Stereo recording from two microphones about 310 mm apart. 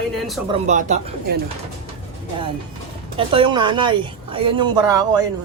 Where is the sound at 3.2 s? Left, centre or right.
Centre.